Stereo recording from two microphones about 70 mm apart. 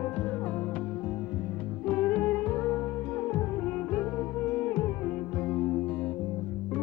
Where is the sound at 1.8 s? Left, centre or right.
Centre.